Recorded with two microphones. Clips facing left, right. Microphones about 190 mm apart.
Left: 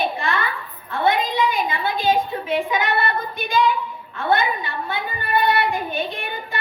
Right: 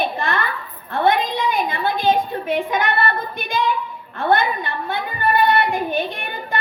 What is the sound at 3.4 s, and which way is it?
Female singing, 50° right (ahead or behind).